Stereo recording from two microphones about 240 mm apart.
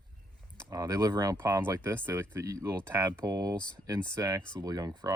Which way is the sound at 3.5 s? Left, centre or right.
Centre.